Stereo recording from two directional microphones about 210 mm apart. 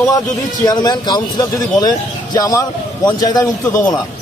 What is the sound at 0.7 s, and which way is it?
A man's voice, 20° left (ahead or behind).